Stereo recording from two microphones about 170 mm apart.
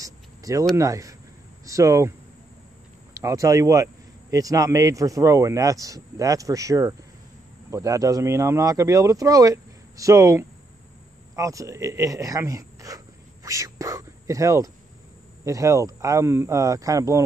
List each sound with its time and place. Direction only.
0.0 s cricket: 20° right (ahead or behind)
0.7 s a man's voice: 20° right (ahead or behind)
3.2 s a man's voice: 20° right (ahead or behind)